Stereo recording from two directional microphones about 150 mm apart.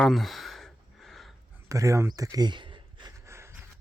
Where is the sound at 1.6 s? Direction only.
20° right (ahead or behind).